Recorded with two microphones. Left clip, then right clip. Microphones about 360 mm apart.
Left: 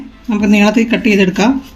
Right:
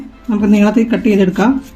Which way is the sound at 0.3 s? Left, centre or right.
Right.